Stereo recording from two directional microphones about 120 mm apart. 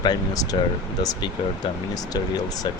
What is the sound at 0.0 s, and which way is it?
Speech, 35° left (ahead or behind).